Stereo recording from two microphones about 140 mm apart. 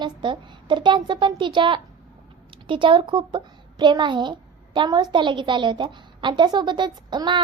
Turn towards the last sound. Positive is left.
turn(degrees=-35)  # may be behind; listen again after turning